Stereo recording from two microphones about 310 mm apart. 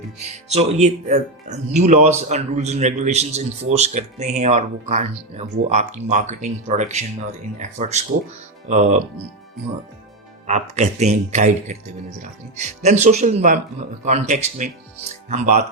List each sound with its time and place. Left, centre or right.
0.2 s speech: right
10.4 s speech: right